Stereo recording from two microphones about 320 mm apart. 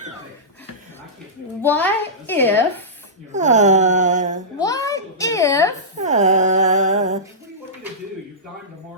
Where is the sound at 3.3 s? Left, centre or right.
Right.